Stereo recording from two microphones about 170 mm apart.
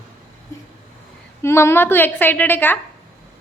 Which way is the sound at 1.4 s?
15° left (ahead or behind).